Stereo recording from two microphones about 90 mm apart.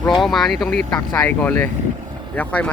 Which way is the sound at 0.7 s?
15° left (ahead or behind).